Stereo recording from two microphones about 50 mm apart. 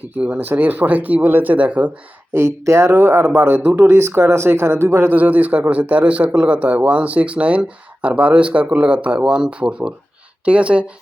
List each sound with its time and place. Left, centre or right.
0.1 s speech: right
2.3 s speech: right
2.9 s speech: right
3.8 s speech: right
5.1 s speech: right